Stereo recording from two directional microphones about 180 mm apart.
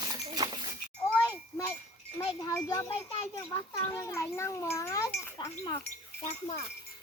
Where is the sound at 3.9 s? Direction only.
15° left (ahead or behind).